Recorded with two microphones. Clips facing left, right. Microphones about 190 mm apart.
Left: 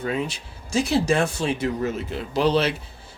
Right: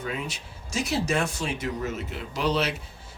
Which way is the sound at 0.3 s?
30° left (ahead or behind).